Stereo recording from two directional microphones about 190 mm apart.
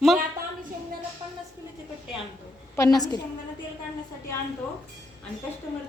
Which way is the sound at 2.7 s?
15° left (ahead or behind).